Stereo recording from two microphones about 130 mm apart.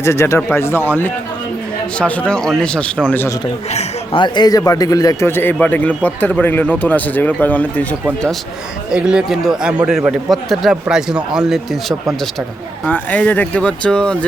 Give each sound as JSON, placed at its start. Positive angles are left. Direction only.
{"t": 0.0, "sound": "a man's voice", "side_deg": 20}
{"t": 4.1, "sound": "a man's voice", "side_deg": 35}
{"t": 5.3, "sound": "speech", "side_deg": 15}
{"t": 8.9, "sound": "speech", "side_deg": -5}
{"t": 12.8, "sound": "speech", "side_deg": 10}